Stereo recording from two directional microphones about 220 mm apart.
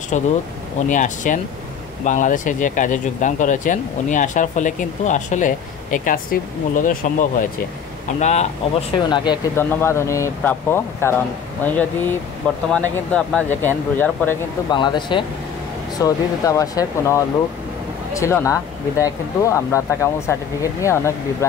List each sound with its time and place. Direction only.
0.1 s speech: 35° left (ahead or behind)
9.1 s speech: 20° left (ahead or behind)
14.7 s speech: 20° left (ahead or behind)